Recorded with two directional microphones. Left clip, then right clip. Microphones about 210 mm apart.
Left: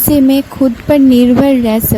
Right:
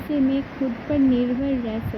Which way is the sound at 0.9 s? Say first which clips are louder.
Left 13 dB; 70° left (ahead or behind).